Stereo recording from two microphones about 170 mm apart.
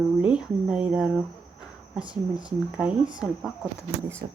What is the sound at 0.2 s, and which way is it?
Speech, 5° right (ahead or behind).